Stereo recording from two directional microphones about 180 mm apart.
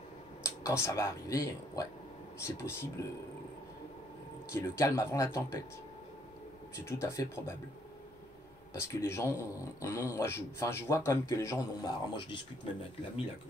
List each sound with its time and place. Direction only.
0.4 s speech: 15° left (ahead or behind)
4.5 s speech: 15° left (ahead or behind)
6.9 s speech: 15° left (ahead or behind)
8.7 s speech: 15° left (ahead or behind)